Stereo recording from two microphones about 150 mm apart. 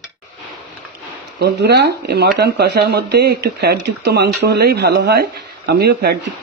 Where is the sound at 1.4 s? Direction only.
90° right.